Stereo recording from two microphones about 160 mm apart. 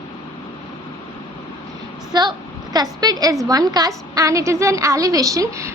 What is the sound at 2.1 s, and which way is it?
A woman's voice, 25° right (ahead or behind).